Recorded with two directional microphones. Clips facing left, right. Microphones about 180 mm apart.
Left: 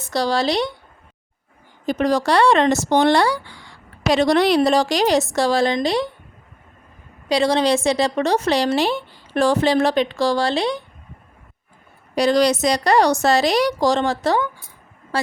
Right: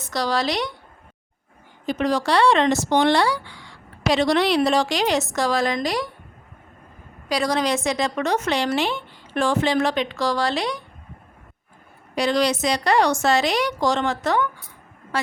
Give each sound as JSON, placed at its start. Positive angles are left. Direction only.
{"t": 0.0, "sound": "speech", "side_deg": 30}
{"t": 1.9, "sound": "speech", "side_deg": 40}
{"t": 7.3, "sound": "speech", "side_deg": 25}
{"t": 12.1, "sound": "speech", "side_deg": 40}